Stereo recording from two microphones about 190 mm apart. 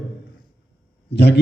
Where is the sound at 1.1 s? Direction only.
60° left (ahead or behind).